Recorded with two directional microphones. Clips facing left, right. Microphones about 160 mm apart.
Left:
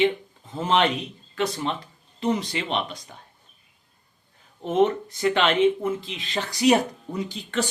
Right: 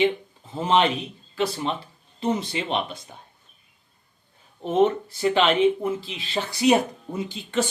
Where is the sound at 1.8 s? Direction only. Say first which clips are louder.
Even; 30° right (ahead or behind).